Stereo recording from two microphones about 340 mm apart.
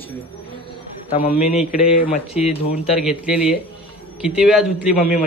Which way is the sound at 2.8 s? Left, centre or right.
Centre.